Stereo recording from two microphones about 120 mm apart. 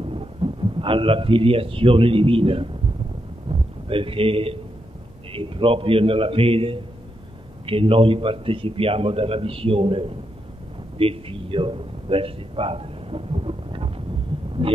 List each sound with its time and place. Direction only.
0.0 s a man's voice: 50° right (ahead or behind)
11.0 s a sound: 50° right (ahead or behind)
14.6 s a man's voice: 50° right (ahead or behind)